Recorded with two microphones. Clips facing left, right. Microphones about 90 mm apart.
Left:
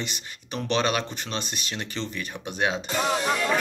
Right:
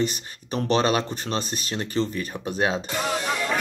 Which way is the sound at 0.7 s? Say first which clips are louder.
Right 3 dB; 35° right (ahead or behind).